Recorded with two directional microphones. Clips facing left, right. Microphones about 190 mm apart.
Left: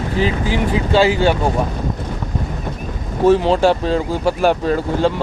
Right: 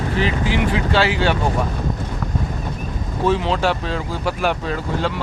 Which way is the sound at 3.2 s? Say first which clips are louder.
Left 6 dB; 40° left (ahead or behind).